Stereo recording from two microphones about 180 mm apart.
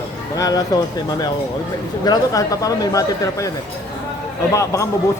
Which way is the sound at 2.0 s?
20° left (ahead or behind).